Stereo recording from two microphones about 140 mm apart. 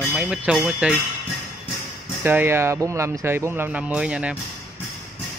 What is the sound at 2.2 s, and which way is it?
Speech, 15° right (ahead or behind).